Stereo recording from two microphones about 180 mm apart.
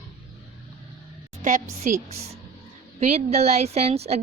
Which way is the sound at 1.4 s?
45° right (ahead or behind).